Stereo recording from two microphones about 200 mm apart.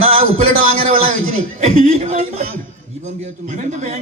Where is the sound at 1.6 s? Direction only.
35° right (ahead or behind).